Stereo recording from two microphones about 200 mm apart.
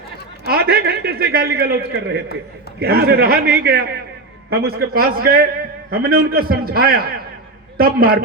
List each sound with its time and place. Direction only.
0.4 s a man's voice: 50° right (ahead or behind)